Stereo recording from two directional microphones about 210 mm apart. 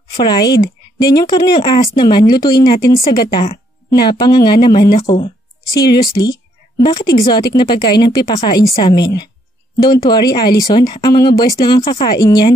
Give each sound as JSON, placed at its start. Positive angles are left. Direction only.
{"t": 0.2, "sound": "speech", "side_deg": 20}